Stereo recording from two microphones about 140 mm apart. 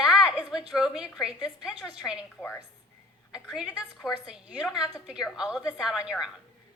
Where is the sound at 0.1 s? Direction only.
5° right (ahead or behind).